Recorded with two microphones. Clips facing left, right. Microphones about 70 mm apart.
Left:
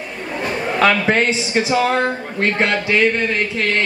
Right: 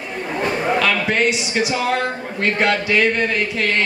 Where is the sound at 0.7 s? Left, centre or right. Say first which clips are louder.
Left 7 dB; left.